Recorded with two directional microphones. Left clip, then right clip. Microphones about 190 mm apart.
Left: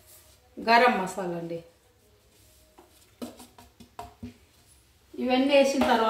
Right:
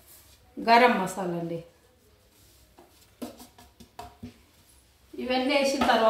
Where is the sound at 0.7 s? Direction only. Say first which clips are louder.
Right 1 dB; 25° right (ahead or behind).